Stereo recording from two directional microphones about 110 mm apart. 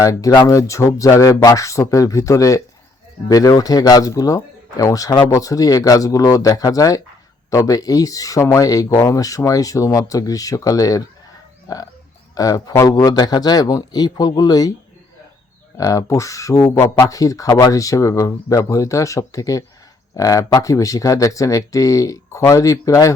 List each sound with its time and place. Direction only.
0.0 s speech: 35° left (ahead or behind)
15.8 s speech: 30° left (ahead or behind)